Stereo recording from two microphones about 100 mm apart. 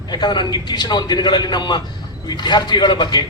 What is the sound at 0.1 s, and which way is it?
A man's voice, 50° left (ahead or behind).